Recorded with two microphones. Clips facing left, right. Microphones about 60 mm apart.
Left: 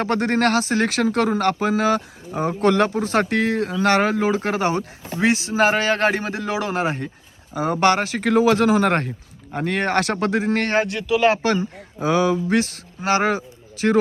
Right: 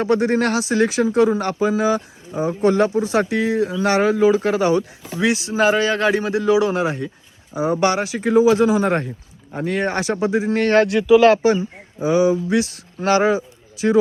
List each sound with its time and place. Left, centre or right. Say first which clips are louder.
0.0 s speech: right 2 dB; left
10.8 s speech: right 7 dB; centre
11.4 s speech: right 4 dB; left